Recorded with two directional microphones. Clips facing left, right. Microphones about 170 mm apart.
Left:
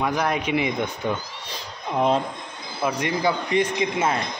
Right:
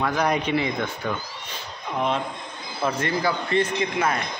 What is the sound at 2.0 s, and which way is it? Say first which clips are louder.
Speech: left 4 dB; 35° left (ahead or behind).